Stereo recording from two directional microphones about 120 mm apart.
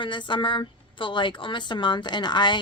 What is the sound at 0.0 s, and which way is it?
A woman's voice, 40° left (ahead or behind).